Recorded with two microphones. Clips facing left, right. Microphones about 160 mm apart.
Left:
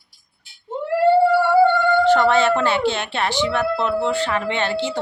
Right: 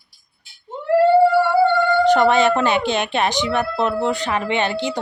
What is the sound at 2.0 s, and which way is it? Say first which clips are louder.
Speech: right 2 dB; 15° right (ahead or behind).